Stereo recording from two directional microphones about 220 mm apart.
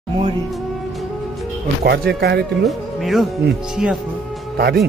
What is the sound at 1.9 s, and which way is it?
Speech, 45° right (ahead or behind).